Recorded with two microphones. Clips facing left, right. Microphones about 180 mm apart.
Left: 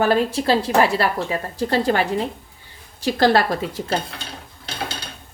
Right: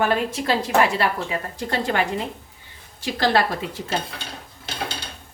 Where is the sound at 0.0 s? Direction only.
35° left (ahead or behind).